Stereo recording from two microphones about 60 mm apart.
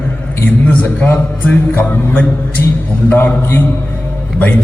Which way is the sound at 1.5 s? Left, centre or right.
Left.